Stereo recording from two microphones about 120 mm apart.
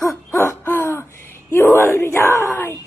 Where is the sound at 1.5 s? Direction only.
20° left (ahead or behind).